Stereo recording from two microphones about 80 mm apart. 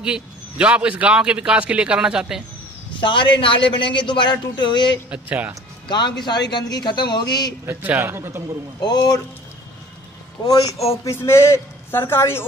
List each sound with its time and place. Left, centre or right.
0.0 s a man's voice: centre
3.0 s a man's voice: left
5.1 s speech: centre
5.9 s a man's voice: left
7.6 s a man's voice: right
8.8 s a man's voice: left
11.1 s a man's voice: left